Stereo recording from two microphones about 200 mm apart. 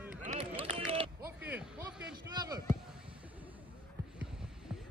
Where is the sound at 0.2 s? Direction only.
35° right (ahead or behind).